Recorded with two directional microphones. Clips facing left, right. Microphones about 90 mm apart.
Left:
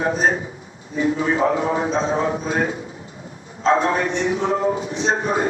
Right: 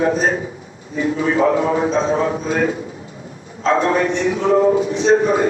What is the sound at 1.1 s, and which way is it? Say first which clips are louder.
A man's voice: right 5 dB; 30° left (ahead or behind).